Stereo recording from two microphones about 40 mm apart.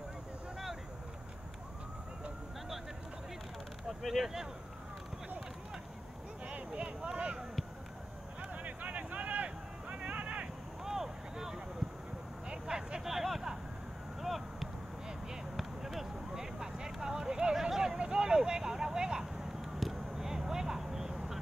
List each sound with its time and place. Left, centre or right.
4.0 s speech: centre
6.4 s a sound: right
7.0 s speech: right
8.6 s a sound: right
10.8 s vehicle: centre
13.1 s vehicle: centre
14.2 s a sound: centre
16.5 s vehicle: centre
17.9 s vehicle: right